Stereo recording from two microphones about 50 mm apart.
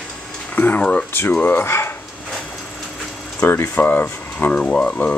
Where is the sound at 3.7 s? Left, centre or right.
Left.